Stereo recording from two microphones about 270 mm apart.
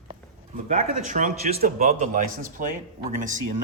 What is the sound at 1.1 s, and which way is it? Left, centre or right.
A man's voice, right.